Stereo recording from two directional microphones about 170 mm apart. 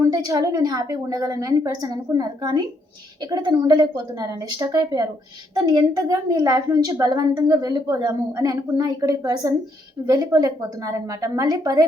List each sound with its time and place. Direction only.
0.0 s a woman's voice: 20° right (ahead or behind)